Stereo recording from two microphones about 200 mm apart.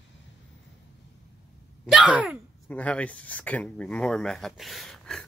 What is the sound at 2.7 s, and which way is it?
Speech, 5° left (ahead or behind).